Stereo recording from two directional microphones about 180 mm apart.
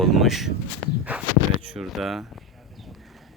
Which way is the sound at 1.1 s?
5° right (ahead or behind).